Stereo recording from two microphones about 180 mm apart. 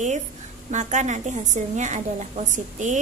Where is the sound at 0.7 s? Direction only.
40° right (ahead or behind).